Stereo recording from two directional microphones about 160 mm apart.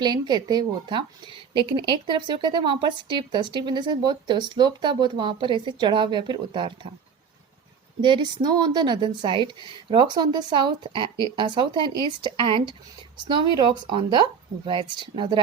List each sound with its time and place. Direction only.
0.0 s speech: 25° right (ahead or behind)
8.0 s speech: 30° right (ahead or behind)